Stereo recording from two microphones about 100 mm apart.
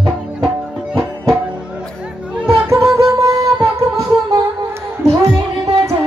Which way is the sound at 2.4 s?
30° right (ahead or behind).